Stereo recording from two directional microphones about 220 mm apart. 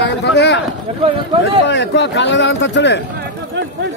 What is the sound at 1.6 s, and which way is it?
Speech, 50° left (ahead or behind).